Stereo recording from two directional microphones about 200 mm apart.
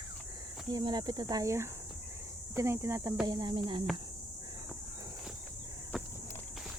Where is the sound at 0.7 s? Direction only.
20° right (ahead or behind).